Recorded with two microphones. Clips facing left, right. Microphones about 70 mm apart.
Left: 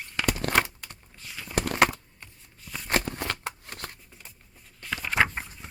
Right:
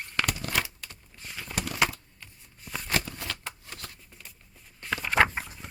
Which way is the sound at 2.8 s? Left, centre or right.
Left.